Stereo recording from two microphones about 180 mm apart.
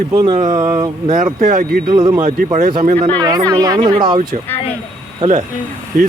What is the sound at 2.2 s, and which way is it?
Speech, 45° right (ahead or behind).